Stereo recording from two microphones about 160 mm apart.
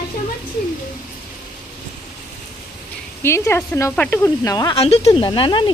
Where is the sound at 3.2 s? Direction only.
15° left (ahead or behind).